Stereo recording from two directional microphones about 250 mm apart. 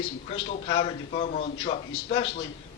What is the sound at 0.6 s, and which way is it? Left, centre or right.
A man's voice, left.